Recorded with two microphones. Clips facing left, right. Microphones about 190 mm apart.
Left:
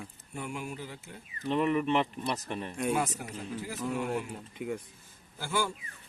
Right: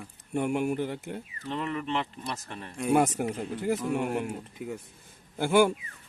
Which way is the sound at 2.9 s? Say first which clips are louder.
Right 8 dB; 60° right (ahead or behind).